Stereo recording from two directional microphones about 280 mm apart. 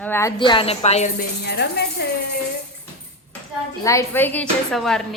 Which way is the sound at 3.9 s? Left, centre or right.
Centre.